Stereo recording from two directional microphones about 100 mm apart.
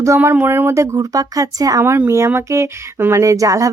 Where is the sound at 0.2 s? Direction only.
20° right (ahead or behind); by 1.8 s 35° right (ahead or behind).